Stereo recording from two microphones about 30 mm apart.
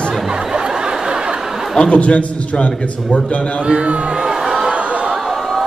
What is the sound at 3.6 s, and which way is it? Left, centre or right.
Music, right.